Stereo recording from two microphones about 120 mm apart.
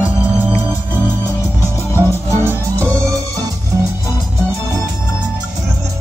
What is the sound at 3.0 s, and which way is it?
Music, 25° right (ahead or behind).